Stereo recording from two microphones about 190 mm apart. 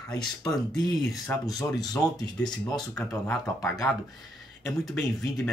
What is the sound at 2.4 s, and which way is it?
Speech, 5° left (ahead or behind).